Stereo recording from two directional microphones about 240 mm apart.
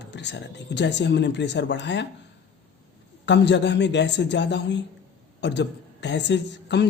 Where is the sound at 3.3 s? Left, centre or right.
Left.